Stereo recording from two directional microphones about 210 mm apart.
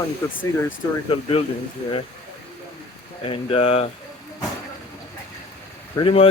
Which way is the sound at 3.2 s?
25° left (ahead or behind).